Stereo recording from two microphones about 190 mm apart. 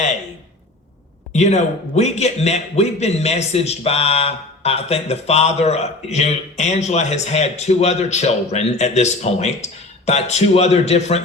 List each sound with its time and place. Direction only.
1.3 s a man's voice: 35° left (ahead or behind)